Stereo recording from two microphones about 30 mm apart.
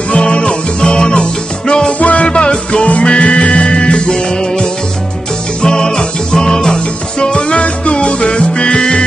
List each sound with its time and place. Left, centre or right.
0.1 s music: left
1.9 s music: left
2.2 s music: left
5.6 s music: left
7.5 s music: left